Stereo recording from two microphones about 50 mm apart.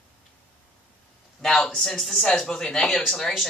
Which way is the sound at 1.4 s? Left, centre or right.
Centre.